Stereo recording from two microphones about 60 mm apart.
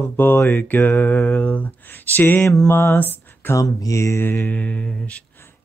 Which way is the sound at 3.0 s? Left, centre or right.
Left.